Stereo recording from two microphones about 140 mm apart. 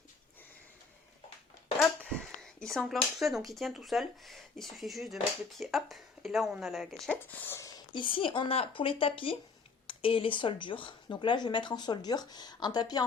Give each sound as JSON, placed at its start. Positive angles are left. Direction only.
{"t": 2.0, "sound": "speech", "side_deg": 5}
{"t": 7.3, "sound": "speech", "side_deg": 15}
{"t": 7.9, "sound": "speech", "side_deg": 35}